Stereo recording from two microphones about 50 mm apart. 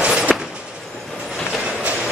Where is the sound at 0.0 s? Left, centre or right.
Centre.